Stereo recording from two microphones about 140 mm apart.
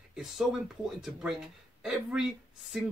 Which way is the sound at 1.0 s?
5° right (ahead or behind).